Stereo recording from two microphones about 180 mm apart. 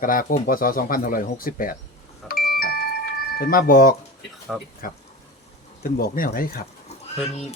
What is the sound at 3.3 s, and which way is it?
Speech, 50° left (ahead or behind).